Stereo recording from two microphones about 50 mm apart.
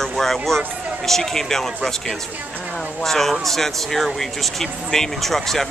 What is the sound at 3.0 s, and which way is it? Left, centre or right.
Speech, centre.